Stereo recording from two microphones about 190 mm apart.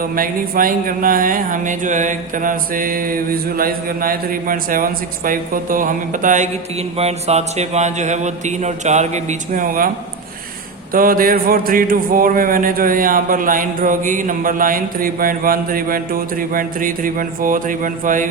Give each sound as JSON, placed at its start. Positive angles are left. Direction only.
{"t": 0.2, "sound": "speech", "side_deg": -45}
{"t": 7.0, "sound": "a sound", "side_deg": -35}
{"t": 10.9, "sound": "speech", "side_deg": -50}